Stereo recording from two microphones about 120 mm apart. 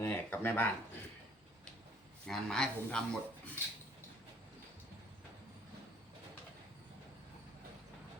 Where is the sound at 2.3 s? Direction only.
5° left (ahead or behind).